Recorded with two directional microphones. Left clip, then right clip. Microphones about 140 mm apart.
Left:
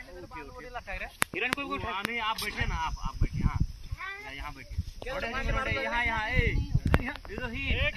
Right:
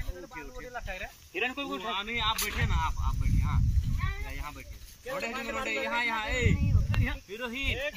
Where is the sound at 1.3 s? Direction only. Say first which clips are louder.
Left 1 dB; 65° right (ahead or behind).